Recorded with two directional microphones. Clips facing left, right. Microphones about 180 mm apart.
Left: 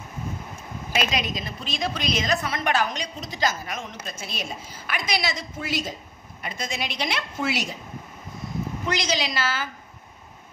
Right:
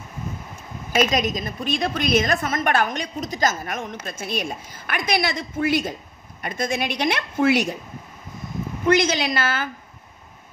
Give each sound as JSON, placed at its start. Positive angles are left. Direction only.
{"t": 1.1, "sound": "a woman's voice", "side_deg": -45}
{"t": 8.8, "sound": "a woman's voice", "side_deg": -55}